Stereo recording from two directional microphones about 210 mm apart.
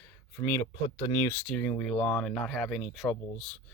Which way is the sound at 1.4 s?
5° left (ahead or behind).